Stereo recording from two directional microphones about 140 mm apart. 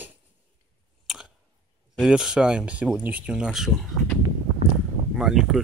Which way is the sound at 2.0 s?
5° right (ahead or behind).